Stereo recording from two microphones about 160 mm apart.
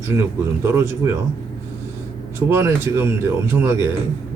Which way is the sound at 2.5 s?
15° right (ahead or behind).